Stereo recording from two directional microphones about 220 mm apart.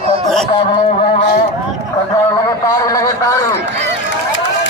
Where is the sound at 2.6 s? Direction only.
15° left (ahead or behind).